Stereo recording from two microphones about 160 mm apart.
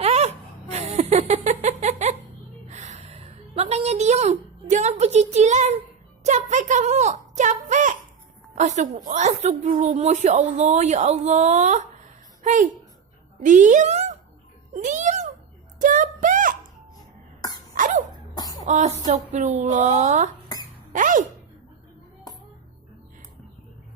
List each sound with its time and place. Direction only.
0.0 s laughter: 40° right (ahead or behind)
2.6 s a sound: 45° right (ahead or behind)
9.0 s a woman's voice: 50° right (ahead or behind)
14.7 s a sound: 50° right (ahead or behind)
17.7 s cough: 55° right (ahead or behind)
18.6 s a woman's voice: 50° right (ahead or behind)